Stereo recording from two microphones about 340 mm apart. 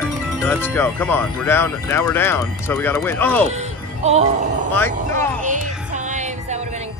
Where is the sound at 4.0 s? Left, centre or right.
Centre.